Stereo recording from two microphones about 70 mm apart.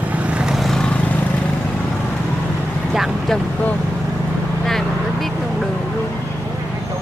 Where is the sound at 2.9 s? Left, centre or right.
Centre.